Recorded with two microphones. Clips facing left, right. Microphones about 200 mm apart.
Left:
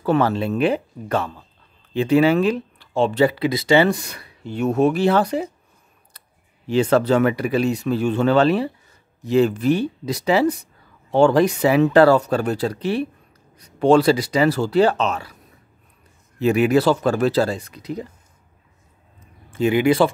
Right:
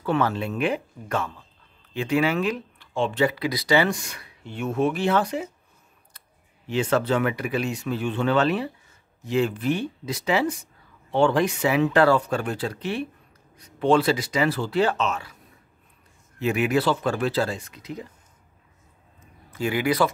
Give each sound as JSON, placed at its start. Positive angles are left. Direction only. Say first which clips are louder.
{"t": 0.0, "sound": "speech", "louder": "left 5 dB", "side_deg": 35}
{"t": 6.7, "sound": "speech", "louder": "left 6 dB", "side_deg": 40}
{"t": 16.3, "sound": "speech", "louder": "left 6 dB", "side_deg": 35}
{"t": 19.5, "sound": "speech", "louder": "left 7 dB", "side_deg": 25}